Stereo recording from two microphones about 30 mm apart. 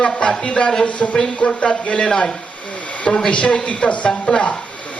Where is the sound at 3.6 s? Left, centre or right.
Left.